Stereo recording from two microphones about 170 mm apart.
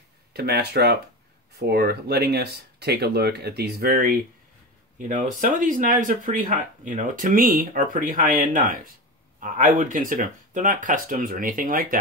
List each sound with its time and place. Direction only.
0.3 s speech: 70° right (ahead or behind)